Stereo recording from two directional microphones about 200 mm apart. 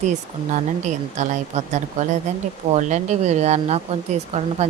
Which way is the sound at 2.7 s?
35° right (ahead or behind).